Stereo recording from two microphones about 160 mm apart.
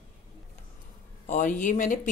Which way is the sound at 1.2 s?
50° left (ahead or behind).